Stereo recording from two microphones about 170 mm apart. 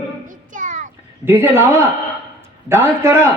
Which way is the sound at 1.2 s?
15° right (ahead or behind).